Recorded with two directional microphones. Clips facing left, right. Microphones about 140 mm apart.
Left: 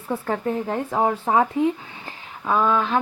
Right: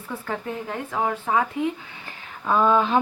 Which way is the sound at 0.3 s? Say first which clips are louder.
Left 5 dB; 40° left (ahead or behind).